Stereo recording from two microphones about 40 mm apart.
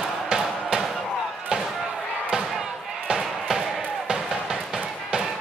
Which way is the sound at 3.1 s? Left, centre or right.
Centre.